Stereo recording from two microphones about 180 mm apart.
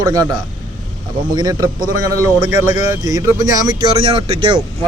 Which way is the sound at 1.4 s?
20° right (ahead or behind).